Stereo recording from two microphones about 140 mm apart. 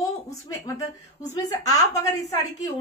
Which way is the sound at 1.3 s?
25° left (ahead or behind).